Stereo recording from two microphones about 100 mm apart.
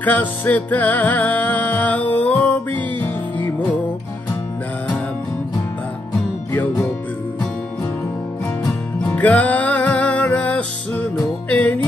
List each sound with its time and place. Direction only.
0.0 s music: 15° left (ahead or behind)
9.0 s music: 15° left (ahead or behind)